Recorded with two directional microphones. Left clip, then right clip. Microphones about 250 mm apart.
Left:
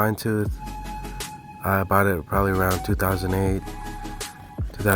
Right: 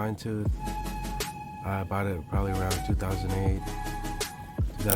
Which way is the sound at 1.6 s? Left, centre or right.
Left.